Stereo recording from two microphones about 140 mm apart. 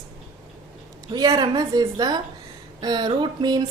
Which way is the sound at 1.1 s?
30° right (ahead or behind).